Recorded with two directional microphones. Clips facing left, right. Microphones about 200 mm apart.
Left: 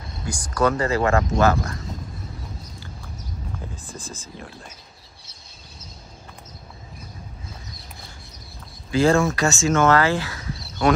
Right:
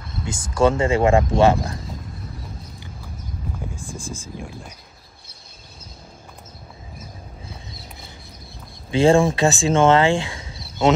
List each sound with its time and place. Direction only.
0.2 s speech: 25° right (ahead or behind)
3.7 s speech: 10° right (ahead or behind)
8.9 s speech: 30° right (ahead or behind)